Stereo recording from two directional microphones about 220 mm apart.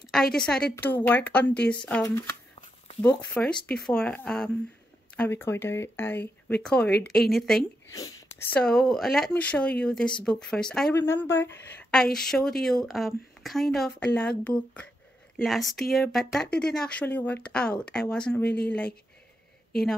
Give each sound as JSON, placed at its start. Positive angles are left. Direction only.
{"t": 0.1, "sound": "speech", "side_deg": 0}
{"t": 7.9, "sound": "speech", "side_deg": 15}